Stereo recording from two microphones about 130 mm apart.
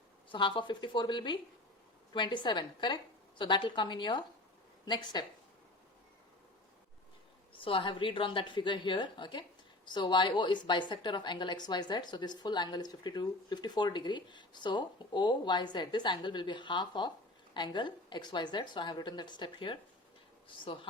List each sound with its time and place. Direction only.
0.3 s a woman's voice: 40° left (ahead or behind)
7.5 s a woman's voice: 40° left (ahead or behind)